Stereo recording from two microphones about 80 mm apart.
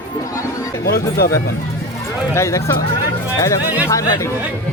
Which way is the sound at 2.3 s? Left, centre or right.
Left.